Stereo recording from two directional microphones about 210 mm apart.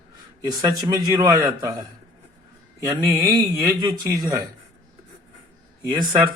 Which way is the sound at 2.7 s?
15° right (ahead or behind).